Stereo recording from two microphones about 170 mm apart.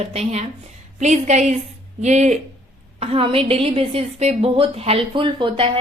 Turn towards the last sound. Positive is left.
turn(degrees=-30)  # may be behind; listen again after turning